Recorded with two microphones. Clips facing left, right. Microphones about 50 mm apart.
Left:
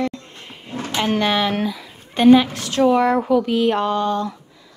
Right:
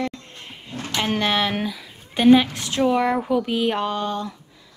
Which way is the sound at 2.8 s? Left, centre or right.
Centre.